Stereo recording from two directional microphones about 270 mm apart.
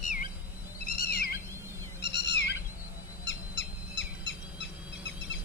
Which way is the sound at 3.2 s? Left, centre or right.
Left.